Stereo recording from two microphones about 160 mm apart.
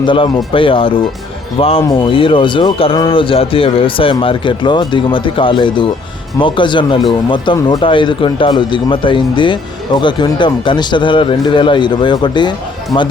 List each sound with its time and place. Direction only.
0.0 s speech: 30° left (ahead or behind)